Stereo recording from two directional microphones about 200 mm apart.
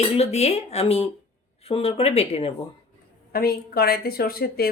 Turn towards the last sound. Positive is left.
turn(degrees=50)  # may be behind; listen again after turning